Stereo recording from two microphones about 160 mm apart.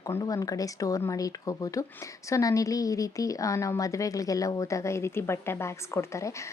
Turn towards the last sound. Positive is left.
turn(degrees=20)  # may be behind; listen again after turning